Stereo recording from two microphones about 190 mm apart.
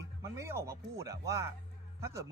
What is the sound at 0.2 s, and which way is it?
Speech, 15° right (ahead or behind).